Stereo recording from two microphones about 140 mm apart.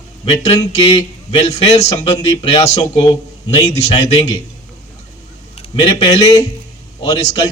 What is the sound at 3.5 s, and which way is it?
Speech, 50° left (ahead or behind).